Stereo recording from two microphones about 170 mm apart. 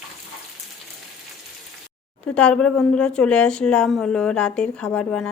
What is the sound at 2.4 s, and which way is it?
A woman's voice, 5° left (ahead or behind).